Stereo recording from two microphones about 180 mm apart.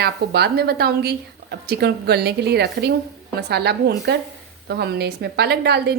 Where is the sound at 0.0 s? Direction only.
60° right (ahead or behind).